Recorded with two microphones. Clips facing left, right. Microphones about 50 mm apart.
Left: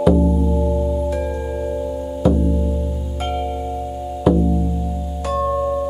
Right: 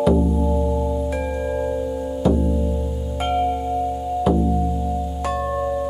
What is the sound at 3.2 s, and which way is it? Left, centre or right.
Singing bowl, centre.